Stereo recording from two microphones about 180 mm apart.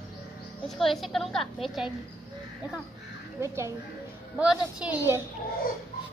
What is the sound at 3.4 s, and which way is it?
A woman's voice, 15° right (ahead or behind).